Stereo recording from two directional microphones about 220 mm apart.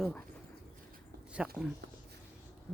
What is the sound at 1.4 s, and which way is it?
Speech, 5° right (ahead or behind).